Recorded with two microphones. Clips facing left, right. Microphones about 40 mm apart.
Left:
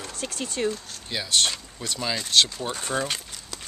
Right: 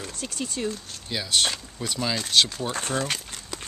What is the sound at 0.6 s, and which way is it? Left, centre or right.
Speech, left.